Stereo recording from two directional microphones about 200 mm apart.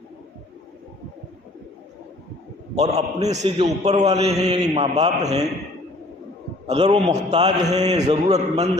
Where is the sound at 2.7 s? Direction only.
35° right (ahead or behind).